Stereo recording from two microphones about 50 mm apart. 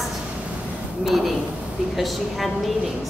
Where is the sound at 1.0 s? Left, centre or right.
Centre.